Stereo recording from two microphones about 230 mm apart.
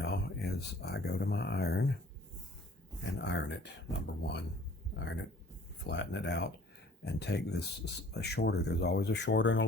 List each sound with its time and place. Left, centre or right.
0.0 s speech: left
3.0 s speech: left